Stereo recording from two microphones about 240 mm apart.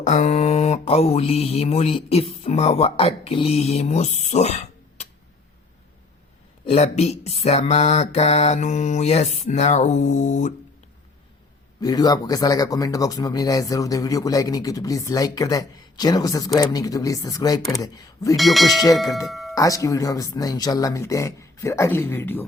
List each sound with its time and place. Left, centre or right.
0.0 s mantra: left
6.7 s mantra: left
11.8 s speech: centre
18.3 s speech: centre
19.3 s doorbell: centre
19.5 s speech: centre